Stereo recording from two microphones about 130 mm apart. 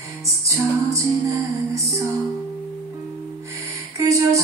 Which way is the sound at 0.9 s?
25° right (ahead or behind).